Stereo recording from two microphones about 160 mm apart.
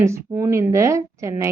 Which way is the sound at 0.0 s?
15° right (ahead or behind).